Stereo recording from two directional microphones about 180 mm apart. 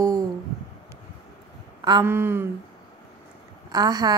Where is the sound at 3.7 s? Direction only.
20° right (ahead or behind).